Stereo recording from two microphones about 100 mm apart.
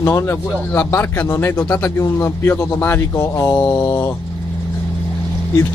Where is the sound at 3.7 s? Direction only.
45° left (ahead or behind).